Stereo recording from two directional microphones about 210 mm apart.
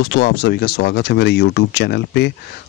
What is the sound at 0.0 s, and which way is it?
Speech, 55° left (ahead or behind).